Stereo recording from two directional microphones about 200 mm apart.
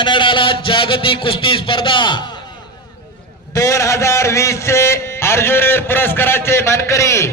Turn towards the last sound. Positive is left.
turn(degrees=15)  # may be behind; listen again after turning